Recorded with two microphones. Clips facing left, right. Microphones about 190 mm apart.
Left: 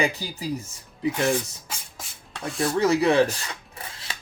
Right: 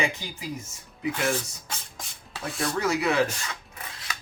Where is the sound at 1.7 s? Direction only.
5° left (ahead or behind).